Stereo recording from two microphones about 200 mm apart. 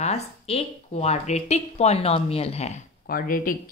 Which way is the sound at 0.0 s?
30° left (ahead or behind).